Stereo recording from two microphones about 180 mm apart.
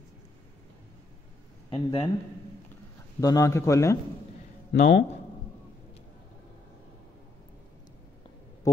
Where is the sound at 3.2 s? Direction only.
20° left (ahead or behind).